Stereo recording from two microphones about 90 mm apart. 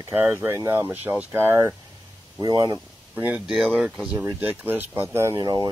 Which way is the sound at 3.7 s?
5° right (ahead or behind).